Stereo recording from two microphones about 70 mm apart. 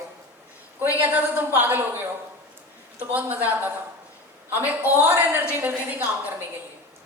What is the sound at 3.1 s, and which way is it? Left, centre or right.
A woman's voice, right.